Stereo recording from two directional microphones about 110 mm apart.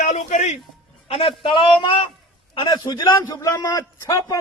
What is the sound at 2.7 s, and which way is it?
A man's voice, 40° left (ahead or behind).